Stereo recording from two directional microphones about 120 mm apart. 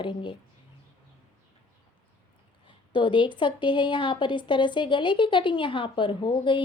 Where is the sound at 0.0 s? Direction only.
45° left (ahead or behind).